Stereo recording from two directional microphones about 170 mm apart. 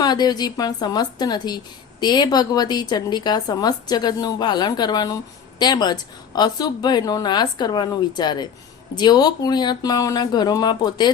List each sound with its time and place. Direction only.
0.0 s a woman's voice: 25° left (ahead or behind)